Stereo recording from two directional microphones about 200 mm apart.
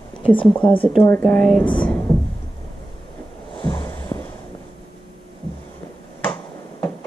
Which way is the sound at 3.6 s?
20° left (ahead or behind).